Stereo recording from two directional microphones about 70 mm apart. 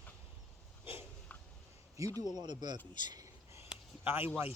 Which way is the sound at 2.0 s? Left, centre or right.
Right.